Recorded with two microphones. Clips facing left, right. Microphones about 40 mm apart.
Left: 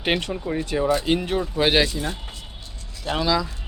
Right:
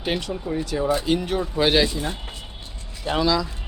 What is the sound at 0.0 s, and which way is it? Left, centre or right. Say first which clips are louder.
Speech: left 2 dB; left.